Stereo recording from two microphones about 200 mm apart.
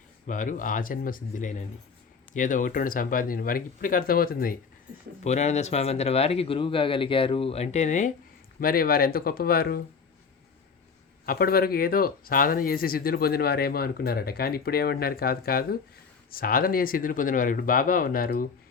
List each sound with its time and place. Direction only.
0.3 s speech: 40° left (ahead or behind)
5.2 s speech: 35° left (ahead or behind)
8.6 s speech: 50° left (ahead or behind)
11.3 s speech: 50° left (ahead or behind)